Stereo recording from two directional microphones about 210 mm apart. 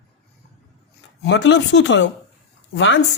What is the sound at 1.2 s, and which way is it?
Speech, 55° left (ahead or behind).